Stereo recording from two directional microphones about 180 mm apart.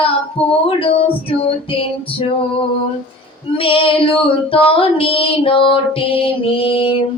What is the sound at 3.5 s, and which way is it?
Female singing, 30° left (ahead or behind).